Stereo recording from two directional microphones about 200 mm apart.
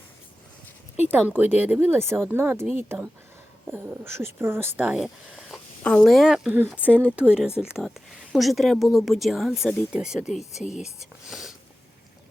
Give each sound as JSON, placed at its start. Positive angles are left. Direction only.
{"t": 1.3, "sound": "speech", "side_deg": -10}
{"t": 10.5, "sound": "speech", "side_deg": 35}
{"t": 11.3, "sound": "a sound", "side_deg": 0}